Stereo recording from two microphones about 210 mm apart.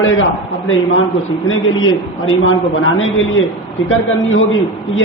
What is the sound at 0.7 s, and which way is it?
A man's voice, 70° left (ahead or behind).